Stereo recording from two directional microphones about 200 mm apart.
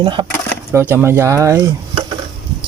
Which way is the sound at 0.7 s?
10° right (ahead or behind).